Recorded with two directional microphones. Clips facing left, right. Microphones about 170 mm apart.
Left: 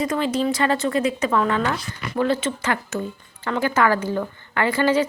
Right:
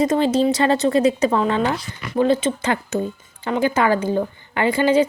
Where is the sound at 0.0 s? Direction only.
25° right (ahead or behind).